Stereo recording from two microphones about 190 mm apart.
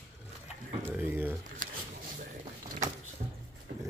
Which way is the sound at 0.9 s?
10° right (ahead or behind).